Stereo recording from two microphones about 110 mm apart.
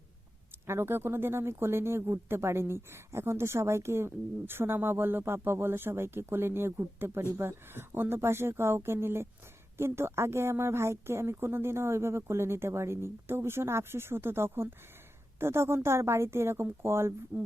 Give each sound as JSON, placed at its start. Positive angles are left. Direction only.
{"t": 0.7, "sound": "speech", "side_deg": -20}